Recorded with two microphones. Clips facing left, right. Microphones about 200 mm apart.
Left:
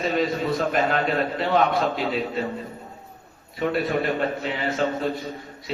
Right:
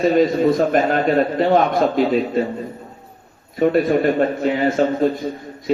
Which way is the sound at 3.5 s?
45° right (ahead or behind).